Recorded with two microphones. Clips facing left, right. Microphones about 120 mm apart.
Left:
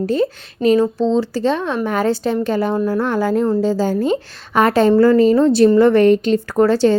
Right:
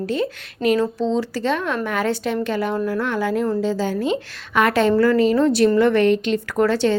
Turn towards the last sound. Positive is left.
turn(degrees=35)  # may be behind; listen again after turning